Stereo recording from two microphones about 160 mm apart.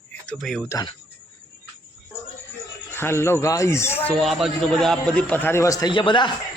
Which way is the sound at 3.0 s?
15° left (ahead or behind).